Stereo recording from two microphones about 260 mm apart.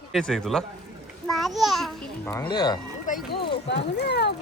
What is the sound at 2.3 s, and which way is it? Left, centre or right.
Speech, centre.